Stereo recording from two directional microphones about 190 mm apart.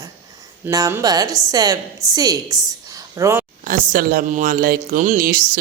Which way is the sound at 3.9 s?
50° right (ahead or behind).